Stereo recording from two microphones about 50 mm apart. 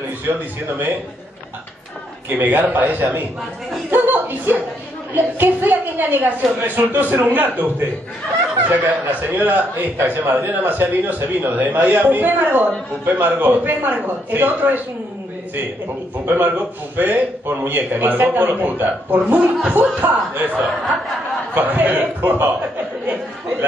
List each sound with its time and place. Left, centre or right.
0.7 s a man's voice: right
2.2 s a man's voice: right
3.9 s chuckle: right
5.1 s a man's voice: right
16.3 s a man's voice: right